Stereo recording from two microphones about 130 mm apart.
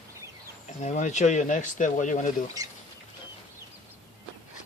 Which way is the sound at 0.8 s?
65° left (ahead or behind).